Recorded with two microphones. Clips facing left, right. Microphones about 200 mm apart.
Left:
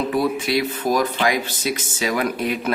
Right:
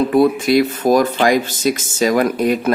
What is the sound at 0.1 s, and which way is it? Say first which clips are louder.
Speech: right 7 dB; 50° right (ahead or behind).